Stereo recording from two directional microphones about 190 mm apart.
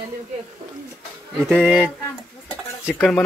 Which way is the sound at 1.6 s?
10° right (ahead or behind).